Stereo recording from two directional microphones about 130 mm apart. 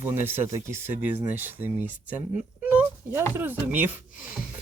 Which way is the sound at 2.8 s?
20° right (ahead or behind).